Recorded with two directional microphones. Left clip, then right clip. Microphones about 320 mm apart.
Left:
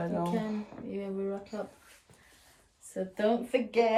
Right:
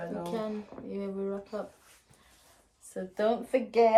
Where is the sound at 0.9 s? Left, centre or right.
Centre.